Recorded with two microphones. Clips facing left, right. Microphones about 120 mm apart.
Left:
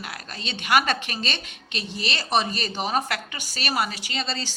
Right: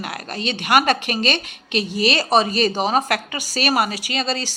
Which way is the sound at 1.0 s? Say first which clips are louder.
Right 9 dB; 90° right.